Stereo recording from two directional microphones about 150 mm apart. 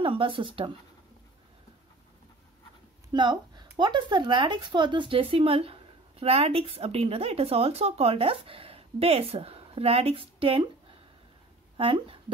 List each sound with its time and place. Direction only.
0.0 s speech: 35° right (ahead or behind)
3.1 s speech: 30° right (ahead or behind)